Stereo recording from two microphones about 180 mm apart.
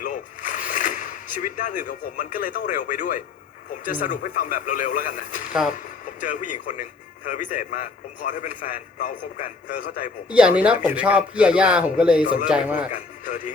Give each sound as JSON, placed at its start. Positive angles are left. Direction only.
{"t": 0.0, "sound": "splash", "side_deg": 45}
{"t": 1.5, "sound": "a man's voice", "side_deg": 45}
{"t": 10.2, "sound": "speech", "side_deg": -5}
{"t": 12.9, "sound": "speech", "side_deg": 45}